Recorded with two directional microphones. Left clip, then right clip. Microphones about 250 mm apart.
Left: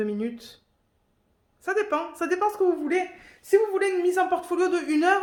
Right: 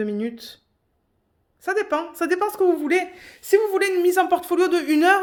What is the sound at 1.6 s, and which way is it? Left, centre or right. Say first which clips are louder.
A woman's voice: right 3 dB; right.